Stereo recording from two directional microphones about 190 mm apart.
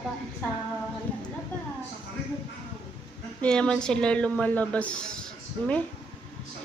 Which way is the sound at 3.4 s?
5° left (ahead or behind).